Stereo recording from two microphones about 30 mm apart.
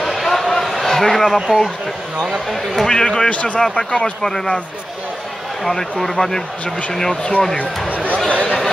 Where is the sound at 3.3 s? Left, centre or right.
Left.